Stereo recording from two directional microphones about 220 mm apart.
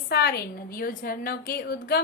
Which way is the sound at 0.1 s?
45° left (ahead or behind).